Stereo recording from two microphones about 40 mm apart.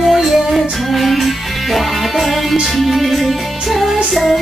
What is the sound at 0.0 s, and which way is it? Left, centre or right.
Music, centre.